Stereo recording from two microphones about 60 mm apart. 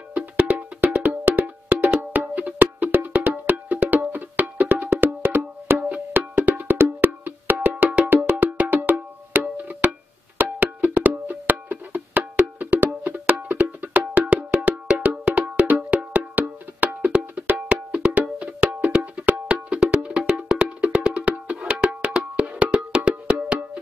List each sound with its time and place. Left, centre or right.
0.1 s wood block: right
2.1 s wood block: right
19.9 s music: right
22.1 s wood block: centre